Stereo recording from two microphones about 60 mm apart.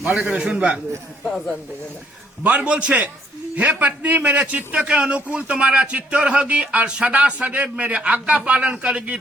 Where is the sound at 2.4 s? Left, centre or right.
Right.